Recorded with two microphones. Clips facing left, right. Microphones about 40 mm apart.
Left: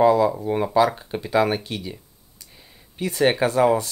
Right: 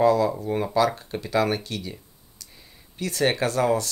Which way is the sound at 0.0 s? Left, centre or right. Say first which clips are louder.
Left 3 dB; centre.